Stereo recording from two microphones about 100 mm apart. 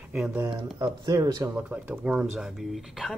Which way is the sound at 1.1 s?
35° right (ahead or behind).